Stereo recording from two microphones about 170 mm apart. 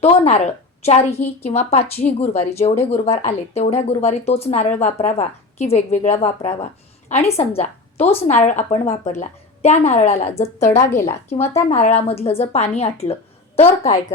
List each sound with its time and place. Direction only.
0.0 s a woman's voice: 35° left (ahead or behind)
10.8 s a woman's voice: 15° left (ahead or behind)
11.7 s speech: 40° left (ahead or behind)